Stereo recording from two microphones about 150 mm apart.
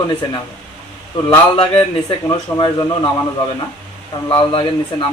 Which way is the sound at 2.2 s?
25° left (ahead or behind).